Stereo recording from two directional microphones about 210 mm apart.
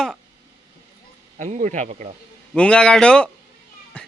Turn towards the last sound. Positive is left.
turn(degrees=5)  # may be behind; listen again after turning